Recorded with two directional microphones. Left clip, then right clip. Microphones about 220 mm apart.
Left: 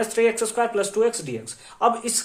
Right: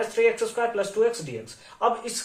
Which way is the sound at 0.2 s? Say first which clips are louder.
Left 1 dB; 50° left (ahead or behind).